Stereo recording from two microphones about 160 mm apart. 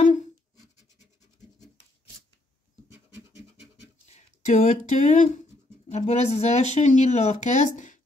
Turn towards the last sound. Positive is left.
turn(degrees=50)  # may be behind; listen again after turning